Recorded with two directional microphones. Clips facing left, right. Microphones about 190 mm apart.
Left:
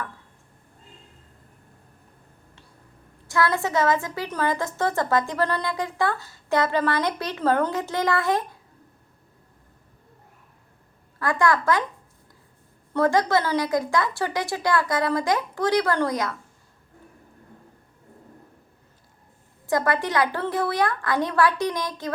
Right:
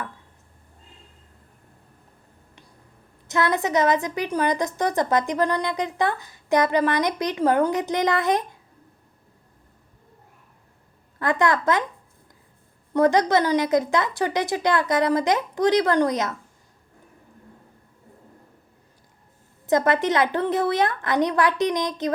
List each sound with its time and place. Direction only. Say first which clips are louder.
3.2 s a woman's voice: right 1 dB; 20° right (ahead or behind)
11.2 s a woman's voice: right 1 dB; 20° right (ahead or behind)
12.9 s a woman's voice: right 2 dB; 20° right (ahead or behind)
19.6 s a woman's voice: right 3 dB; 20° right (ahead or behind)